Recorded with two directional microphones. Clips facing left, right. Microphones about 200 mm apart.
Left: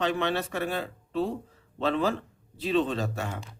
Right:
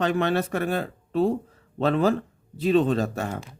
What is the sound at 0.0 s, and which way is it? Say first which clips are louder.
Speech: right 4 dB; 45° right (ahead or behind).